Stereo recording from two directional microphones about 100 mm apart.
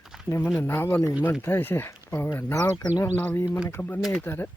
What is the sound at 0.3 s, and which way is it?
Speech, 20° left (ahead or behind).